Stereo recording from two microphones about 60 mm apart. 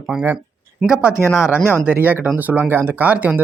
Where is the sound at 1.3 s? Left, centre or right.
Left.